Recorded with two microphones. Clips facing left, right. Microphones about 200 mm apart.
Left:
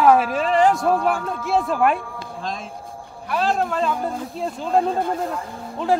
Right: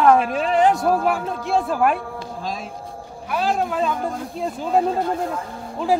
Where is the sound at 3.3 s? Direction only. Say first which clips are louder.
Even; 5° right (ahead or behind).